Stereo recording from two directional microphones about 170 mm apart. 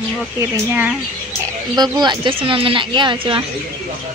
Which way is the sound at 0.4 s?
10° right (ahead or behind).